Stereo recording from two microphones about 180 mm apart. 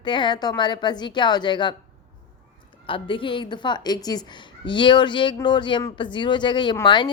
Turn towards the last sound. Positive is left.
turn(degrees=25)  # may be behind; listen again after turning